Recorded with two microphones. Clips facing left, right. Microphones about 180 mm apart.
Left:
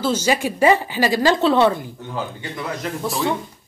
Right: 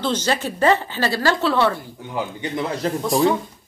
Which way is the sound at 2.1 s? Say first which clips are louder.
Right 4 dB; 15° right (ahead or behind).